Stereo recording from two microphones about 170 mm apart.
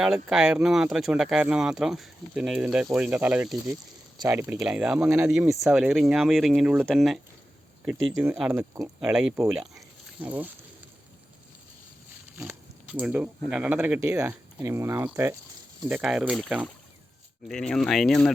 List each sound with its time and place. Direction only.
0.0 s speech: 5° right (ahead or behind)
9.7 s a sound: 10° right (ahead or behind)
12.4 s speech: 10° right (ahead or behind)